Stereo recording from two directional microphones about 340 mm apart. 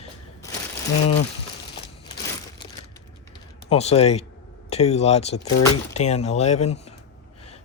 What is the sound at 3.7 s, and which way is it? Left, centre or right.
Speech, centre.